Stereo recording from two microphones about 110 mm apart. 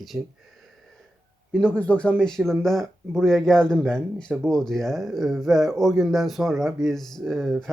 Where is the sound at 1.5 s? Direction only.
10° left (ahead or behind).